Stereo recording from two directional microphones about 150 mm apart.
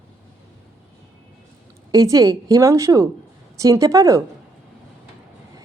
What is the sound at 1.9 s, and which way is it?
Speech, 25° right (ahead or behind).